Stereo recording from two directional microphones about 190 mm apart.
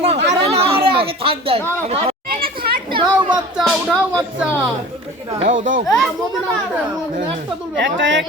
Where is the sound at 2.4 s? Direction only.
50° right (ahead or behind).